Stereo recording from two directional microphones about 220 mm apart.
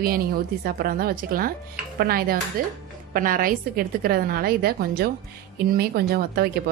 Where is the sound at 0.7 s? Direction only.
40° right (ahead or behind).